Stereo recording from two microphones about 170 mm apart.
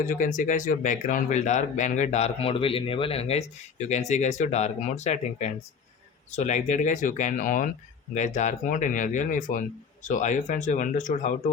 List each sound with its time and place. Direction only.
0.0 s speech: 50° left (ahead or behind)